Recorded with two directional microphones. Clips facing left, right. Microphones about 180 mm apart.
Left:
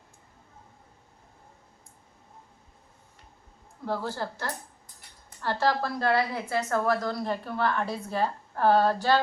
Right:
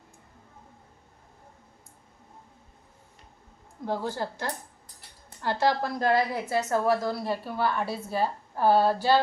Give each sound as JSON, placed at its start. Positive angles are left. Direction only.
{"t": 3.8, "sound": "a woman's voice", "side_deg": -15}